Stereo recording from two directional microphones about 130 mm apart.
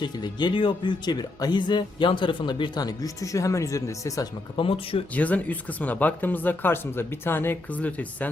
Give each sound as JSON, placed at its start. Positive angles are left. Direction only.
{"t": 0.0, "sound": "speech", "side_deg": 35}
{"t": 4.5, "sound": "speech", "side_deg": 45}
{"t": 5.1, "sound": "speech", "side_deg": 10}